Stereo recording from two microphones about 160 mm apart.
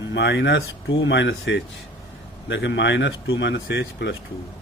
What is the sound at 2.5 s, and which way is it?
A man's voice, 90° left.